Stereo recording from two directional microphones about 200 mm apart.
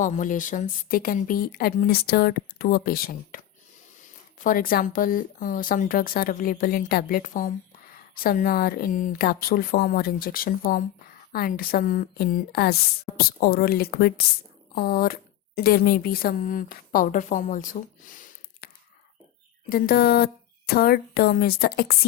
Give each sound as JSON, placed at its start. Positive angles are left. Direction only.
{"t": 0.0, "sound": "a woman's voice", "side_deg": 40}
{"t": 19.7, "sound": "speech", "side_deg": 50}